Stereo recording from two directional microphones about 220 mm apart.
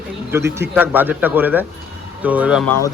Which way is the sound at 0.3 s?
10° right (ahead or behind).